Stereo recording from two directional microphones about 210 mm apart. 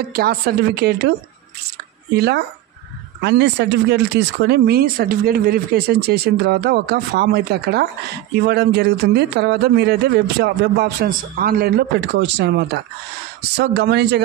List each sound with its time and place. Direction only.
0.1 s speech: 50° right (ahead or behind)
2.1 s speech: 50° right (ahead or behind)